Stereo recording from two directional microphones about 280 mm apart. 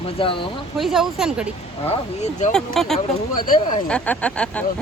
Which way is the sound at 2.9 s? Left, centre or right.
Left.